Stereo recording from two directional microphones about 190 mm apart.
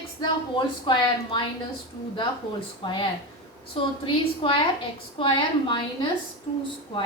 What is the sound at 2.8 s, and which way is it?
Speech, 25° left (ahead or behind).